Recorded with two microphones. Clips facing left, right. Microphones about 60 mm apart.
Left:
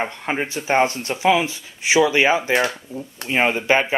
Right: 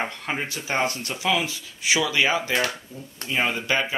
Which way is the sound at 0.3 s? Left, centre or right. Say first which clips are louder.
Left 9 dB; left.